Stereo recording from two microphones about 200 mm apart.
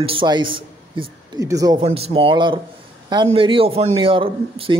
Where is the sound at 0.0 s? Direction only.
25° right (ahead or behind).